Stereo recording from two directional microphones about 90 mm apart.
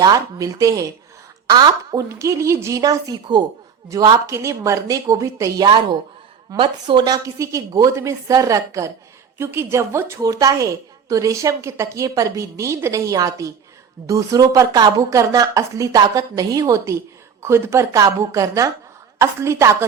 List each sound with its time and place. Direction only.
0.0 s a woman's voice: 45° right (ahead or behind)
1.5 s a woman's voice: 55° right (ahead or behind)
2.0 s a woman's voice: 35° right (ahead or behind)
3.9 s a woman's voice: 35° right (ahead or behind)
6.6 s a woman's voice: 55° right (ahead or behind); by 10.2 s 30° right (ahead or behind)
10.2 s a woman's voice: 40° right (ahead or behind)